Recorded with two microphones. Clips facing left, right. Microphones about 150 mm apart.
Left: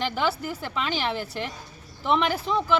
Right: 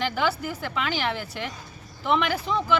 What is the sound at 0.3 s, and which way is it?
Speech, 30° left (ahead or behind).